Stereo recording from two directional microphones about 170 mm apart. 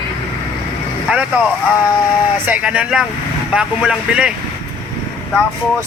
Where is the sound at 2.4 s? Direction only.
10° right (ahead or behind).